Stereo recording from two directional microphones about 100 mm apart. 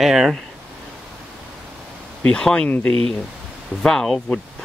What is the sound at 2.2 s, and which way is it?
Speech, 10° left (ahead or behind).